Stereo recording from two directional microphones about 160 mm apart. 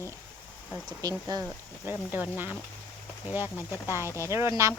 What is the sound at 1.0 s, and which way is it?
Speech, 25° right (ahead or behind).